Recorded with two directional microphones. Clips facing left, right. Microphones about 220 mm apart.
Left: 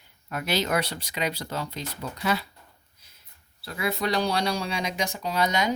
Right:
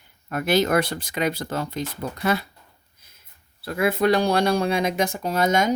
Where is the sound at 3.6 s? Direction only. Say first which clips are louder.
Right 8 dB; 50° right (ahead or behind).